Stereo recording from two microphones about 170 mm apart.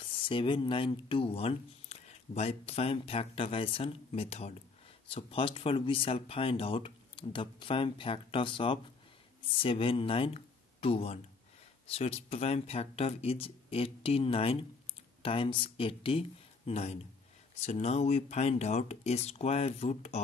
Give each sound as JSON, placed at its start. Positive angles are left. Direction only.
{"t": 0.0, "sound": "speech", "side_deg": 30}